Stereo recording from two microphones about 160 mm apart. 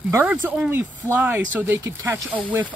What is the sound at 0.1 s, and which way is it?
Speech, 15° right (ahead or behind).